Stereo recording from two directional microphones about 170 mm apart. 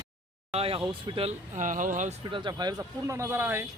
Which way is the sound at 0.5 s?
35° right (ahead or behind).